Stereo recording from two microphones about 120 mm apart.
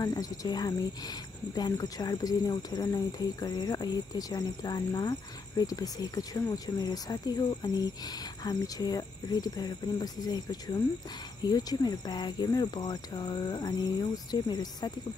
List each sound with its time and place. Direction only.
0.0 s speech: 30° left (ahead or behind)